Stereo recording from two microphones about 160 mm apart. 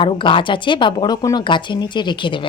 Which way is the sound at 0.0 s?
30° left (ahead or behind).